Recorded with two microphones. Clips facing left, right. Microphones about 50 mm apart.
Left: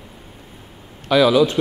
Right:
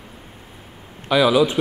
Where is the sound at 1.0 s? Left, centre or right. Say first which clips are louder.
Left 2 dB; centre.